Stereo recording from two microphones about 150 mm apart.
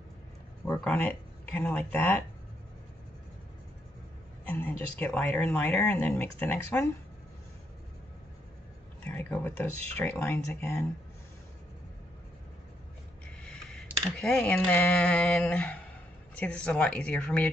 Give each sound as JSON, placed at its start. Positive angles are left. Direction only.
{"t": 0.7, "sound": "speech", "side_deg": 5}
{"t": 4.5, "sound": "a woman's voice", "side_deg": 15}
{"t": 9.0, "sound": "speech", "side_deg": 15}
{"t": 13.4, "sound": "a sound", "side_deg": 5}
{"t": 14.1, "sound": "speech", "side_deg": 5}